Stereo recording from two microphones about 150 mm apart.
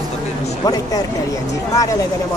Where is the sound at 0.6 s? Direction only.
25° left (ahead or behind).